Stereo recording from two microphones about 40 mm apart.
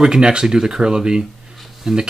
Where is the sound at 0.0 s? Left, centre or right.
Centre.